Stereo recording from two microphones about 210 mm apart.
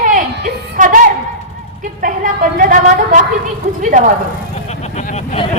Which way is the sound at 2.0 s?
40° right (ahead or behind).